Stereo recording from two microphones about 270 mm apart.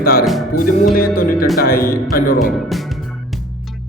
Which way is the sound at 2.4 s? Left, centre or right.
Centre.